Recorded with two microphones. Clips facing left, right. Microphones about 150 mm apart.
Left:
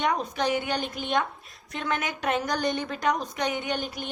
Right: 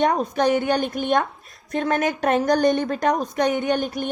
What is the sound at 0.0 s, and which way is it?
Speech, 40° right (ahead or behind).